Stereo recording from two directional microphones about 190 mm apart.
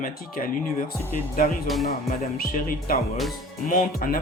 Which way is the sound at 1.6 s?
Centre (ahead or behind).